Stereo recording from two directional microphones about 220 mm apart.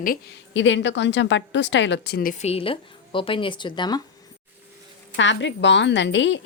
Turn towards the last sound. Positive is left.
turn(degrees=55)  # may be behind; listen again after turning